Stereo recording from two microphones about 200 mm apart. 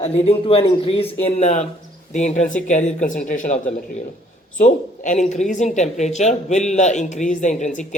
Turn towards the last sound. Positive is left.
turn(degrees=40)  # may be behind; listen again after turning